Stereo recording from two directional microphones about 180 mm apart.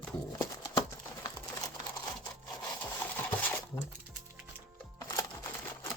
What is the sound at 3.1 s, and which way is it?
Cutlery, 10° left (ahead or behind).